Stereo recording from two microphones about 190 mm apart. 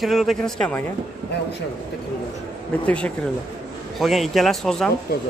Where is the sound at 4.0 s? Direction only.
Centre (ahead or behind).